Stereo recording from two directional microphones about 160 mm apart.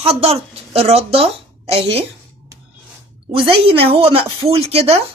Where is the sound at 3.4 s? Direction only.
35° right (ahead or behind).